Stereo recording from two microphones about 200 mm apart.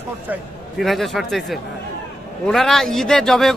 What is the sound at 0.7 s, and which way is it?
A man's voice, centre (ahead or behind).